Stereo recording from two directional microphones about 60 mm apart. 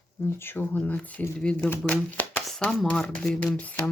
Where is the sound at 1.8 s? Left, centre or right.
Left.